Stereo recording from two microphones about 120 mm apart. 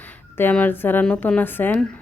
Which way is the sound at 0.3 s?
15° left (ahead or behind).